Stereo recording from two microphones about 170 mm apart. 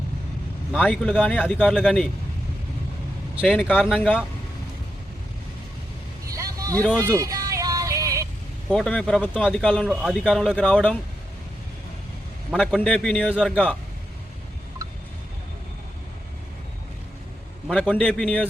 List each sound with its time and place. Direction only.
0.8 s speech: 5° left (ahead or behind)
3.4 s speech: centre (ahead or behind)
6.3 s vehicle: 20° right (ahead or behind)
6.7 s speech: 5° left (ahead or behind)
7.0 s music: 15° right (ahead or behind)
8.7 s speech: 5° left (ahead or behind)
9.9 s speech: 5° right (ahead or behind)
12.5 s speech: 5° left (ahead or behind)
17.7 s speech: 5° left (ahead or behind)